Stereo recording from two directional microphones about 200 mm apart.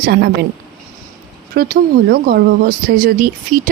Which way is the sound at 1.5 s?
50° right (ahead or behind).